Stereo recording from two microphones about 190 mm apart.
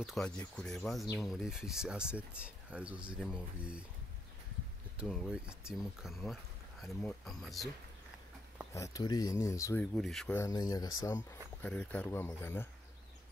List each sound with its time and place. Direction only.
0.0 s speech: centre (ahead or behind)
4.9 s speech: centre (ahead or behind)
8.7 s speech: 15° left (ahead or behind)
9.9 s speech: centre (ahead or behind)
10.3 s speech: 15° left (ahead or behind)
11.6 s speech: 5° left (ahead or behind)